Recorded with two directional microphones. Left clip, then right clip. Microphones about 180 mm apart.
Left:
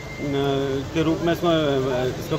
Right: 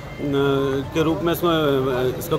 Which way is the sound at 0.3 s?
25° right (ahead or behind).